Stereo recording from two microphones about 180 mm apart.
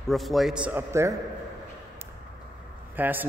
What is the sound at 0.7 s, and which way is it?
Speech, 15° right (ahead or behind).